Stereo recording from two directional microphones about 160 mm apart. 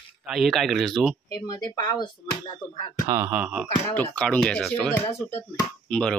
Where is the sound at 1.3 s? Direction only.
25° left (ahead or behind).